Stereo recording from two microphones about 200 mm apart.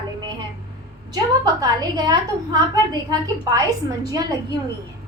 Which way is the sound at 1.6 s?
20° right (ahead or behind).